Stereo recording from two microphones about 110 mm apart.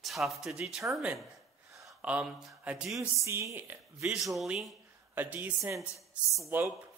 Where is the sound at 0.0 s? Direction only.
Centre (ahead or behind).